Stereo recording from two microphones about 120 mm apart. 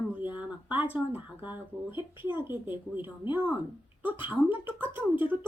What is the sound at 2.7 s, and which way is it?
Speech, 45° left (ahead or behind).